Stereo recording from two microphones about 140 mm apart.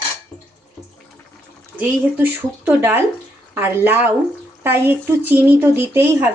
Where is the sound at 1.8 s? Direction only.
10° right (ahead or behind).